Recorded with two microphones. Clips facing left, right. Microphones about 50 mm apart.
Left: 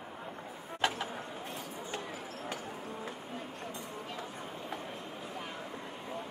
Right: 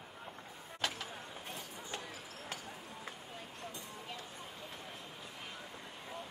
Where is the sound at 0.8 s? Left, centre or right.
Left.